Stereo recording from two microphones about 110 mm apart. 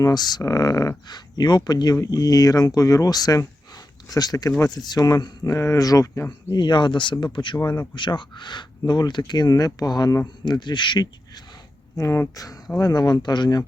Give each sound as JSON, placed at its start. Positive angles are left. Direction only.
{"t": 0.0, "sound": "speech", "side_deg": 40}
{"t": 11.9, "sound": "speech", "side_deg": 25}